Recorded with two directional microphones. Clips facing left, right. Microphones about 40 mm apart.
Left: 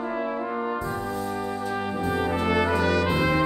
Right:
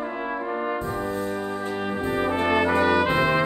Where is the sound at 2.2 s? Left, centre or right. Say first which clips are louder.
Right 3 dB; right.